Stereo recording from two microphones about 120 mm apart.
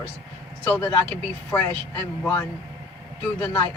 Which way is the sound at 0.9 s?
10° left (ahead or behind).